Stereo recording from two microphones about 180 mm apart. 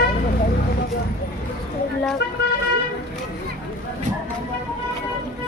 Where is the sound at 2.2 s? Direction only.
65° left (ahead or behind).